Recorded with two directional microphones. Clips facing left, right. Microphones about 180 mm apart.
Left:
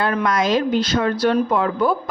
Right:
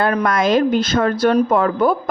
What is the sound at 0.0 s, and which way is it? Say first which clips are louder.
Speech: right 3 dB; 45° right (ahead or behind).